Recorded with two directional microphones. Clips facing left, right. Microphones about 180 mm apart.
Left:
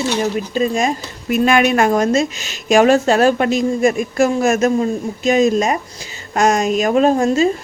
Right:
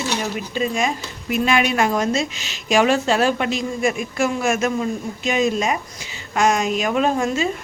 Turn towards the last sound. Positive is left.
turn(degrees=40)  # may be behind; listen again after turning